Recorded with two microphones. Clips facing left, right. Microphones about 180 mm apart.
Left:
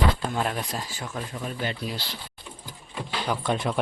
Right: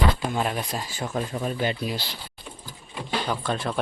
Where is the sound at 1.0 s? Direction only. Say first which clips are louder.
Right 5 dB; 35° right (ahead or behind).